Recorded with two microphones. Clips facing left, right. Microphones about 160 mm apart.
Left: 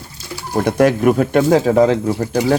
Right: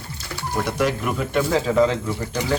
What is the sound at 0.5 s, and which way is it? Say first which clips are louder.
Speech: left 9 dB; 55° left (ahead or behind).